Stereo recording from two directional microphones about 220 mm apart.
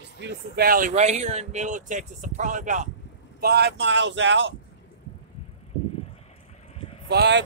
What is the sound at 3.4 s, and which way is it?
Speech, 50° right (ahead or behind).